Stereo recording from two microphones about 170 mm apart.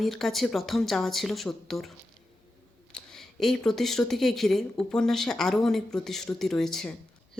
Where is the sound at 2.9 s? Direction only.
Centre (ahead or behind).